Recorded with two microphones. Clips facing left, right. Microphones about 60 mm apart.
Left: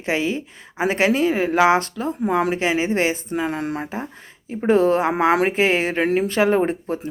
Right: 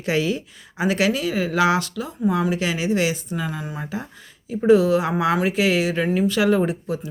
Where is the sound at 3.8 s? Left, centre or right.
Left.